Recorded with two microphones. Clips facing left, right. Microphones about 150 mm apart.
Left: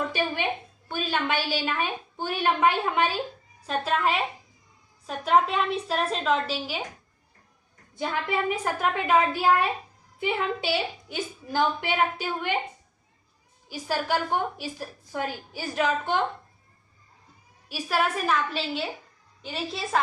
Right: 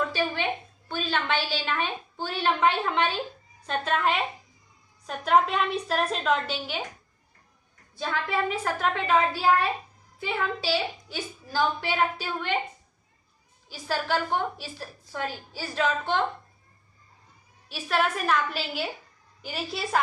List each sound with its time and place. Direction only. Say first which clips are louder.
0.1 s a sound: even; 15° left (ahead or behind)
0.9 s a woman's voice: left 1 dB; 10° left (ahead or behind)
7.9 s a woman's voice: left 1 dB; 15° left (ahead or behind)
13.7 s a woman's voice: left 1 dB; 10° left (ahead or behind)
17.7 s a woman's voice: even; 10° left (ahead or behind)